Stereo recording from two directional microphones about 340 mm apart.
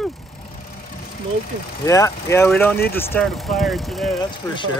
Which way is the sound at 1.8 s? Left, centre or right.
Centre.